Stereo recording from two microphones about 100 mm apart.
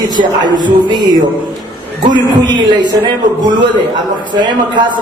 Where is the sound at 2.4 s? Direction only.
45° right (ahead or behind).